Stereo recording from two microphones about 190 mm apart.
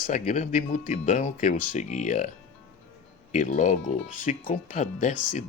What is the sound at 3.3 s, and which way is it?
Speech, 40° left (ahead or behind).